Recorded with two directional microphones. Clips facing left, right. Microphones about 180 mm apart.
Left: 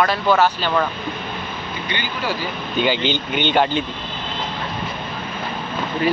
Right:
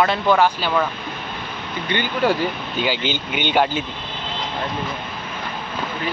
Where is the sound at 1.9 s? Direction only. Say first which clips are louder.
Right 7 dB; 50° right (ahead or behind).